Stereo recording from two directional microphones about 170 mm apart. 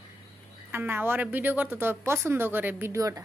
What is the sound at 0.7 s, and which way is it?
A woman's voice, 10° right (ahead or behind).